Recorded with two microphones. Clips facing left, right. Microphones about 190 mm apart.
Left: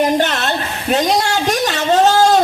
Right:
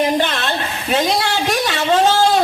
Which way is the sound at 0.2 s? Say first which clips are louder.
Left 2 dB; 40° left (ahead or behind).